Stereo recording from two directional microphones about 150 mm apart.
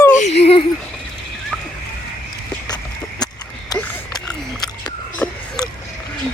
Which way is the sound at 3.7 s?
25° left (ahead or behind).